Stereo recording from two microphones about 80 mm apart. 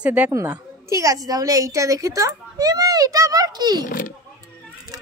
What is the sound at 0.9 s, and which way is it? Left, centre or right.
A woman's voice, right.